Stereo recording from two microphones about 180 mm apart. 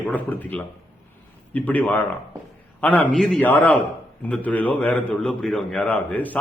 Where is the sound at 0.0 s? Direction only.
10° left (ahead or behind).